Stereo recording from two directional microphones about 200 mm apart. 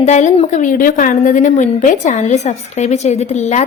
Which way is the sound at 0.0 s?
35° left (ahead or behind).